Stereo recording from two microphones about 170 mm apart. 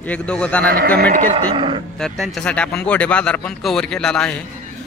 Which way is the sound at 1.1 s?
35° right (ahead or behind).